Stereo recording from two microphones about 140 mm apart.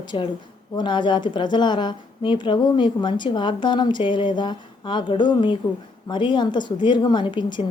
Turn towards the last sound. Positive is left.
turn(degrees=35)  # may be behind; listen again after turning